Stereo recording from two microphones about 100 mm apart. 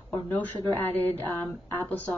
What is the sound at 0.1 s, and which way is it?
Speech, 20° left (ahead or behind).